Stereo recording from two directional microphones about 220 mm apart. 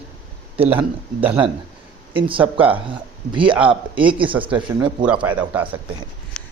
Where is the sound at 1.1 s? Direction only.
25° right (ahead or behind).